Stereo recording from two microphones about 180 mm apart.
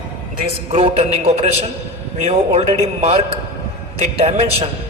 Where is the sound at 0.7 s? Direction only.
35° right (ahead or behind).